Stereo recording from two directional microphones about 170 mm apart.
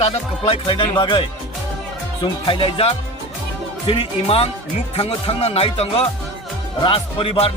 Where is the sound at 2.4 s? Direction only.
30° left (ahead or behind).